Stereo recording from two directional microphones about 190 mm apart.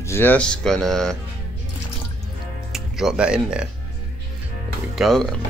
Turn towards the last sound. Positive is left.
turn(degrees=0)  # may be behind; listen again after turning